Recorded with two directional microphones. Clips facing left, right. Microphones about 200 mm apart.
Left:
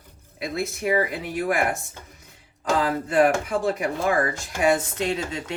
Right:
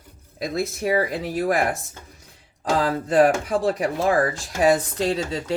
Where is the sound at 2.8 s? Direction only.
35° right (ahead or behind).